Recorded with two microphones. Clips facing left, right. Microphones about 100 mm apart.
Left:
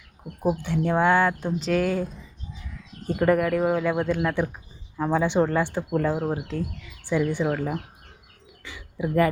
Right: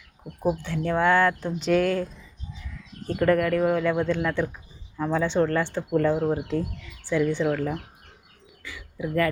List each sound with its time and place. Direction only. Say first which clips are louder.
0.4 s speech: left 2 dB; 15° left (ahead or behind)
1.5 s speech: right 2 dB; centre (ahead or behind)
3.1 s speech: even; 15° left (ahead or behind)
7.0 s speech: right 1 dB; 15° left (ahead or behind)
8.6 s bird: left 2 dB; 25° left (ahead or behind)